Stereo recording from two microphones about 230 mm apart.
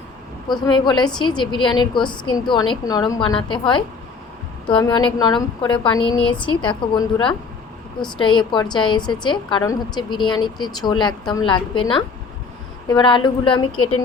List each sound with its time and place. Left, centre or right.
0.4 s a woman's voice: centre